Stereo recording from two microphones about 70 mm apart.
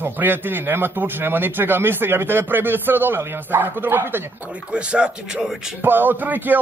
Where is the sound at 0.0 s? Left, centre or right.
Right.